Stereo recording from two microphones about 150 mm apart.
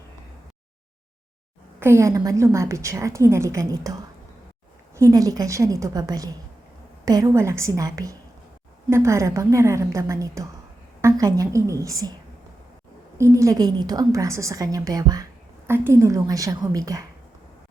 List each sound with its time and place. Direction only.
1.8 s a woman's voice: 15° right (ahead or behind)
4.9 s a woman's voice: 25° right (ahead or behind)
13.1 s a woman's voice: 20° right (ahead or behind)